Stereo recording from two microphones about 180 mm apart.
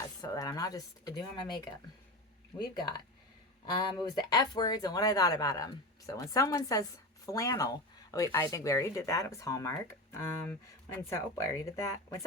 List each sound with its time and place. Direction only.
0.2 s speech: 20° left (ahead or behind)
3.8 s speech: 20° left (ahead or behind)